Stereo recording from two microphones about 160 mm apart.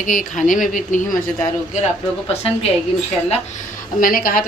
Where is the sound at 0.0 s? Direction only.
55° left (ahead or behind).